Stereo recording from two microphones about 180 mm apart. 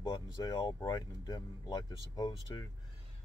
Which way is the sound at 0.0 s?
25° left (ahead or behind).